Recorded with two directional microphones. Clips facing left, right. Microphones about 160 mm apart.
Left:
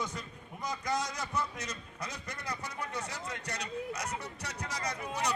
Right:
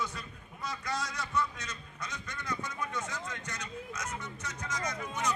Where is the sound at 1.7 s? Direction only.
35° left (ahead or behind).